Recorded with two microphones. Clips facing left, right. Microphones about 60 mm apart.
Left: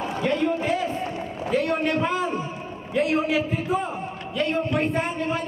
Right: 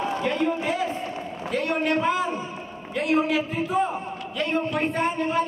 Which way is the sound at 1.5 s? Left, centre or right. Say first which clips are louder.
Left 1 dB; centre.